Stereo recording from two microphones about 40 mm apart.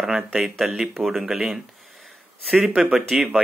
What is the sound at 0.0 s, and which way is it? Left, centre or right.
Speech, centre.